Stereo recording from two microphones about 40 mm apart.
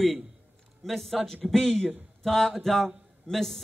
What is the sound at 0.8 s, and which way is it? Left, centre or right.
A man's voice, centre.